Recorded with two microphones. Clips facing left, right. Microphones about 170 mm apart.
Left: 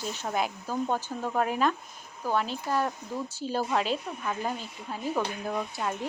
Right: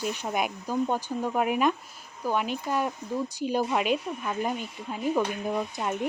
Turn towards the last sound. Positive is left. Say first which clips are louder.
# right 2 dB
turn(degrees=-15)  # may be behind; listen again after turning